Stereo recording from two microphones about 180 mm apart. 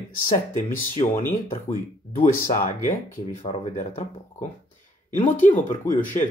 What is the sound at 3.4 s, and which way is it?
Speech, 40° left (ahead or behind).